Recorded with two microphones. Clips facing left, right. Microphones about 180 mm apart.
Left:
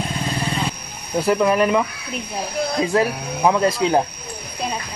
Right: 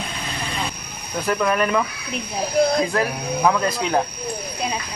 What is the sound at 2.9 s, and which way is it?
Speech, 25° left (ahead or behind).